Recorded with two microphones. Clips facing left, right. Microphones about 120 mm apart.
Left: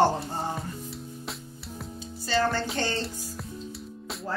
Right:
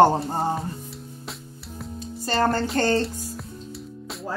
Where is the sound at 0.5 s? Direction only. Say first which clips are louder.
Right 4 dB; centre (ahead or behind).